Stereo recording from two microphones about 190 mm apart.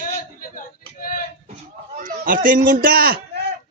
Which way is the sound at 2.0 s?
45° right (ahead or behind).